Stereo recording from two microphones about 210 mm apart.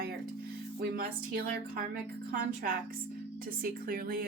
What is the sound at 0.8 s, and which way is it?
Speech, 45° right (ahead or behind).